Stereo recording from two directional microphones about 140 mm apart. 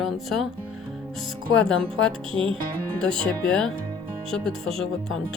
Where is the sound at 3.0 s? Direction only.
5° left (ahead or behind).